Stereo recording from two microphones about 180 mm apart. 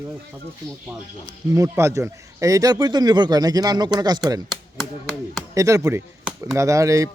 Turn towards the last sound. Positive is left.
turn(degrees=-20)  # may be behind; listen again after turning